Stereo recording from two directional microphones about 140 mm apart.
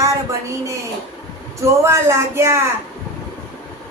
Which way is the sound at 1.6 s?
20° right (ahead or behind).